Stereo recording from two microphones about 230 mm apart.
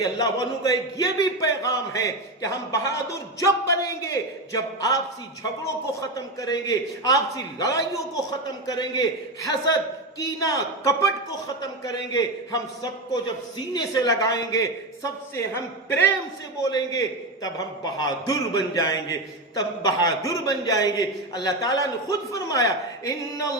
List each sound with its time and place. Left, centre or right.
0.0 s a man's voice: centre